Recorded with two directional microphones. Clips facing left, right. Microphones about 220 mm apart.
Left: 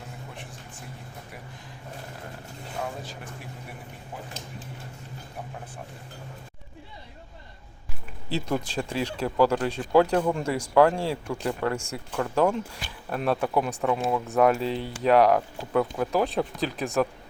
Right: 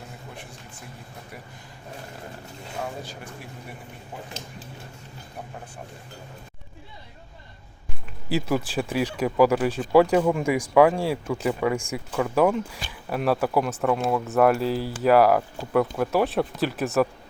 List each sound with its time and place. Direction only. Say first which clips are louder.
8.3 s speech: right 3 dB; 5° right (ahead or behind)